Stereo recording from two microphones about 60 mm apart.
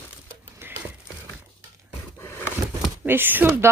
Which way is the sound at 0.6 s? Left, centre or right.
Right.